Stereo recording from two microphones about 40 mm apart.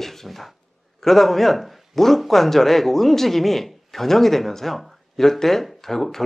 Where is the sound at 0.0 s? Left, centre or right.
Centre.